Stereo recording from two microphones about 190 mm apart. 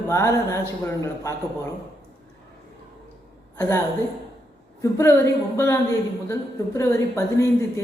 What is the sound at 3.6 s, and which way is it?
Speech, 15° left (ahead or behind).